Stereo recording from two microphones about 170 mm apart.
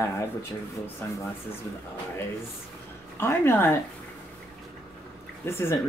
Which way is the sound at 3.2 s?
15° left (ahead or behind).